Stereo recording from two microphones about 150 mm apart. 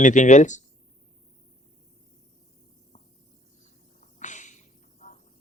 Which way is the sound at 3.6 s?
55° left (ahead or behind).